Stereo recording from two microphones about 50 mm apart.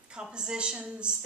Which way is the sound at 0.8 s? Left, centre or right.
Centre.